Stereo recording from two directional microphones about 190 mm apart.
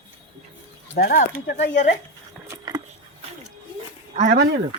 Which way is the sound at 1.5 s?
65° left (ahead or behind).